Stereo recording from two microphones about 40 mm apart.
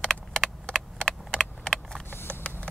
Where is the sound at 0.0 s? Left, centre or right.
Centre.